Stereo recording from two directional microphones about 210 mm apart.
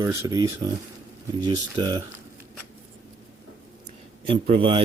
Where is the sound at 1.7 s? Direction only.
20° right (ahead or behind).